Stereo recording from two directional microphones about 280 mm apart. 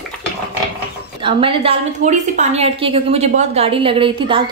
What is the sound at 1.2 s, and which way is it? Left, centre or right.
A woman's voice, centre.